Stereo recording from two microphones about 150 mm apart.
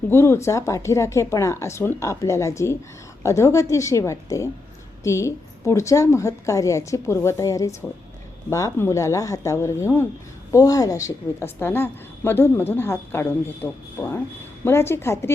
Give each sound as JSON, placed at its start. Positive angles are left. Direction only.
{"t": 0.1, "sound": "a woman's voice", "side_deg": 15}